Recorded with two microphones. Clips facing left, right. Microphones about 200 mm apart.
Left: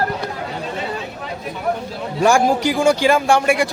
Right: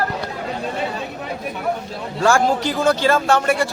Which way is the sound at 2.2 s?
15° left (ahead or behind).